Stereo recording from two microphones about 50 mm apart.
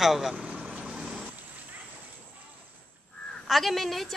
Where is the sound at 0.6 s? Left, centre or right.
Right.